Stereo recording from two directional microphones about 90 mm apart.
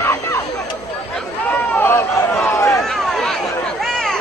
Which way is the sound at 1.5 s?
20° left (ahead or behind).